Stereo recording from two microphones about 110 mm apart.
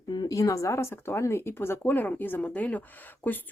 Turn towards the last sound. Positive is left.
turn(degrees=15)  # may be behind; listen again after turning